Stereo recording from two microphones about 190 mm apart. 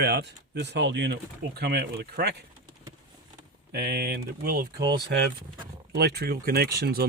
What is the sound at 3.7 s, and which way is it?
Speech, 55° right (ahead or behind).